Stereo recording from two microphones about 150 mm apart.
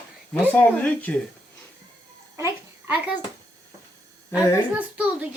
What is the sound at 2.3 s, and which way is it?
Babbling, 20° right (ahead or behind).